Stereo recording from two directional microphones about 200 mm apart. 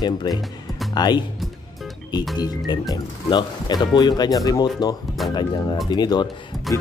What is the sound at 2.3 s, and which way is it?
Speech, 20° left (ahead or behind).